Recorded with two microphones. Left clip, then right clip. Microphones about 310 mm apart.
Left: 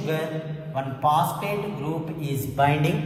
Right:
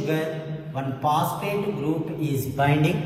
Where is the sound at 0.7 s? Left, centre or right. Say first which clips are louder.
Left 2 dB; centre.